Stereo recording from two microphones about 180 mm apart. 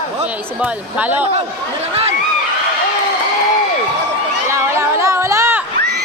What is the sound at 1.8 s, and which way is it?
Speech, 35° right (ahead or behind).